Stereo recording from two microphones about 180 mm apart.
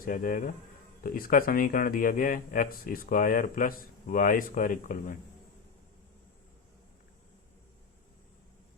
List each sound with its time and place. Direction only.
0.0 s speech: 50° left (ahead or behind)